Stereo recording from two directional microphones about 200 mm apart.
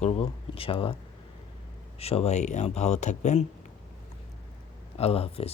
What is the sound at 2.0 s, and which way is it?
Speech, 30° left (ahead or behind).